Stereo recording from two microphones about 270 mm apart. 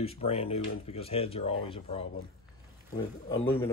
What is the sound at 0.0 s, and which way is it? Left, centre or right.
Speech, left.